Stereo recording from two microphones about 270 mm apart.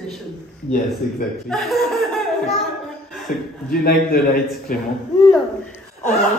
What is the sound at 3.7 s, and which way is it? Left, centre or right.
A man's voice, left.